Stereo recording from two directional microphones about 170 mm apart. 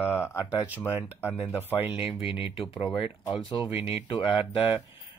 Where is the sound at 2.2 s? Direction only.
30° left (ahead or behind).